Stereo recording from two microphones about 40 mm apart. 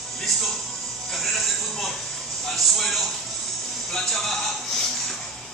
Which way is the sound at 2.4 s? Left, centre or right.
Centre.